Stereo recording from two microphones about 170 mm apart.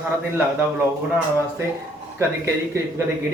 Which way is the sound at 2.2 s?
15° right (ahead or behind).